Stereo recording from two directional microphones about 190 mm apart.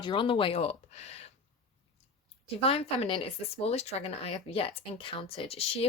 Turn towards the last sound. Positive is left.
turn(degrees=30)  # may be behind; listen again after turning